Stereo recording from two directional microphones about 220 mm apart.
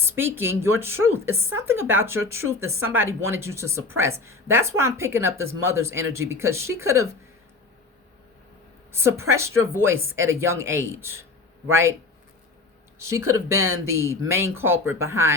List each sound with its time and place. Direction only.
0.0 s speech: 10° right (ahead or behind)
8.9 s a woman's voice: 10° right (ahead or behind)
13.1 s speech: 15° right (ahead or behind)
13.5 s speech: 70° right (ahead or behind)
13.9 s speech: 10° right (ahead or behind)